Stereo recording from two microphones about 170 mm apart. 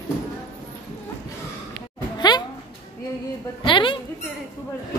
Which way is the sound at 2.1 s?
25° left (ahead or behind).